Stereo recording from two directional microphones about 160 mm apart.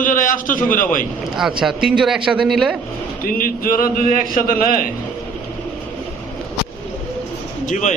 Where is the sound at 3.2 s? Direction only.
65° left (ahead or behind).